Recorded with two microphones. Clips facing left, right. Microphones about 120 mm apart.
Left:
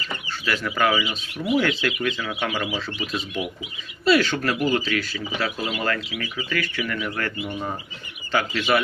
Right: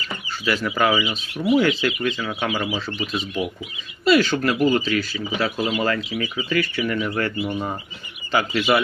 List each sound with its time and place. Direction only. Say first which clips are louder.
0.4 s speech: right 2 dB; 5° right (ahead or behind)
6.1 s speech: right 5 dB; 20° right (ahead or behind)
6.8 s speech: right 5 dB; 35° right (ahead or behind)
7.2 s speech: right 4 dB; 15° right (ahead or behind)